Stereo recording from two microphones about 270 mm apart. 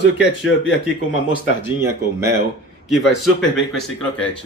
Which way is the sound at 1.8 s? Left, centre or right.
Centre.